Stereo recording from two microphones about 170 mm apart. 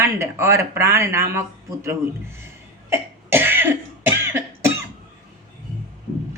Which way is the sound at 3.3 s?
15° right (ahead or behind).